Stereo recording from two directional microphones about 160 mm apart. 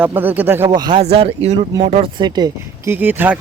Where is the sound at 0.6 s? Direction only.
25° right (ahead or behind).